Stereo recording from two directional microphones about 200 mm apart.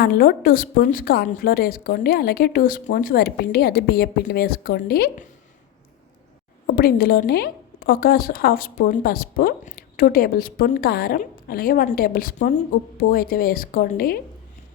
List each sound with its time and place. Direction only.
0.0 s a woman's voice: 50° left (ahead or behind)
6.7 s a woman's voice: 50° left (ahead or behind)